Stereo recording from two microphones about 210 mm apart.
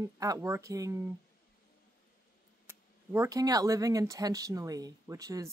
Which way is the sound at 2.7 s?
10° right (ahead or behind).